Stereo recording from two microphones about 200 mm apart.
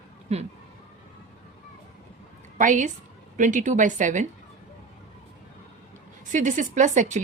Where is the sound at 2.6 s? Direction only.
40° right (ahead or behind).